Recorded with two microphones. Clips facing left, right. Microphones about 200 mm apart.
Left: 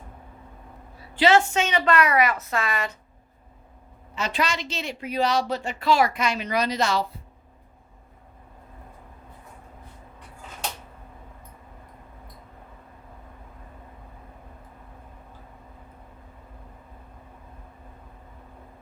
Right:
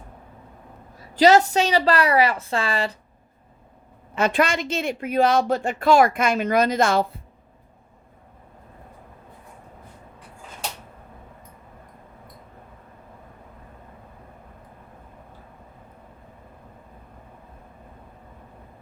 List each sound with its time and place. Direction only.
1.1 s a woman's voice: 40° right (ahead or behind)
4.1 s a woman's voice: 55° right (ahead or behind)